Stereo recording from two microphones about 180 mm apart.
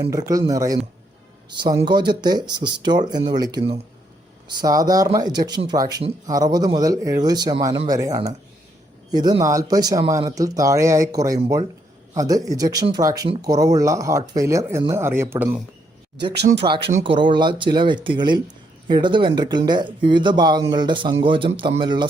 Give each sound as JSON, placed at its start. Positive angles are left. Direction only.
{"t": 0.1, "sound": "a man's voice", "side_deg": -20}
{"t": 16.6, "sound": "speech", "side_deg": -25}